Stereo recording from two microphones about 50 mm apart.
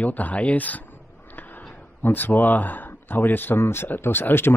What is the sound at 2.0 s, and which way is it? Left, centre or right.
Speech, left.